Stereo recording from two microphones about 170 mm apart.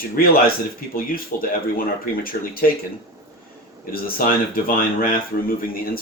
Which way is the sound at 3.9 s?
60° left (ahead or behind).